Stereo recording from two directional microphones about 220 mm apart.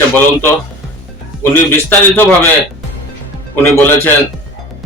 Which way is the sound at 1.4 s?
10° left (ahead or behind).